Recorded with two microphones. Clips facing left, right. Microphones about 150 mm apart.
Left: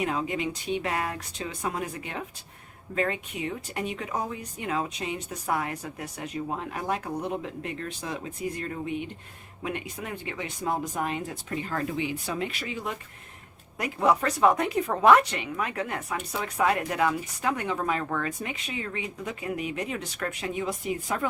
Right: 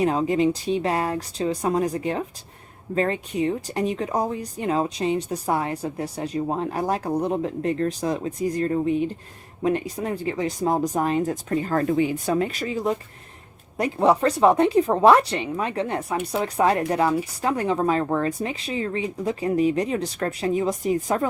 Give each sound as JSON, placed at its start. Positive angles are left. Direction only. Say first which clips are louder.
{"t": 0.0, "sound": "speech", "louder": "right 8 dB", "side_deg": -35}